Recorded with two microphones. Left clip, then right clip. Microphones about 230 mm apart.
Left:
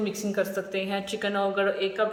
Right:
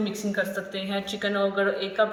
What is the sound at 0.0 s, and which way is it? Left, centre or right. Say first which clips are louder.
A woman's voice: even; centre.